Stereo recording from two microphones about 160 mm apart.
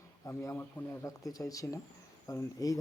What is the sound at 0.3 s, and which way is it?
Speech, 15° left (ahead or behind).